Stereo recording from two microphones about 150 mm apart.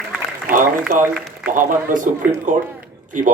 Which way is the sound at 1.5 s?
65° right (ahead or behind).